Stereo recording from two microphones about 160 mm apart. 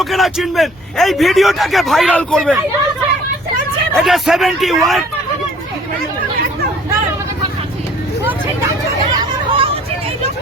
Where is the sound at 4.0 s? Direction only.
Centre (ahead or behind).